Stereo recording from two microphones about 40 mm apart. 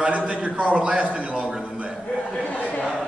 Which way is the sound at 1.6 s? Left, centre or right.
Right.